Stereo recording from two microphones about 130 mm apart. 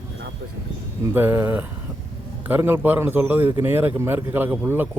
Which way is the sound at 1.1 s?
15° right (ahead or behind).